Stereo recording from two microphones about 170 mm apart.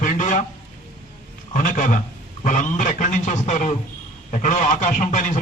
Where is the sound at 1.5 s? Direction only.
50° left (ahead or behind).